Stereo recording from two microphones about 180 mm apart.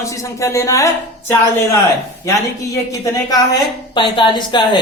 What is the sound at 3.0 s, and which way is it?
Speech, 20° left (ahead or behind).